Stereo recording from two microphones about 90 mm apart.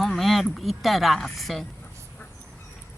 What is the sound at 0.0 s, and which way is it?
Speech, centre (ahead or behind).